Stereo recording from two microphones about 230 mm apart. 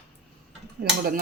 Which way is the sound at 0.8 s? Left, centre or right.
Right.